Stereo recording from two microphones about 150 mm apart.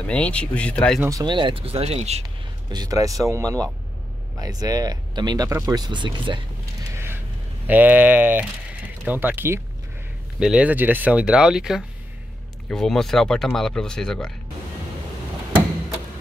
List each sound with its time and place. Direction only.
0.0 s speech: 10° left (ahead or behind)
1.2 s speech: 30° right (ahead or behind)
2.7 s speech: 25° right (ahead or behind)
7.6 s speech: 10° right (ahead or behind)